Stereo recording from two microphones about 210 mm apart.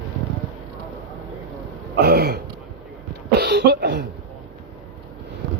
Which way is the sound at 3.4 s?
50° right (ahead or behind).